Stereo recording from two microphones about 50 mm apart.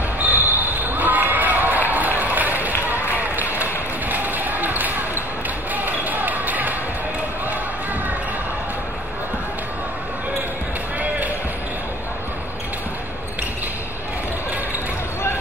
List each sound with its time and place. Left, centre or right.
0.2 s basketball bounce: right